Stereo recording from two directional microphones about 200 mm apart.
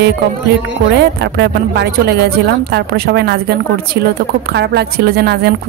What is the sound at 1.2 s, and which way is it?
A woman's voice, 55° right (ahead or behind).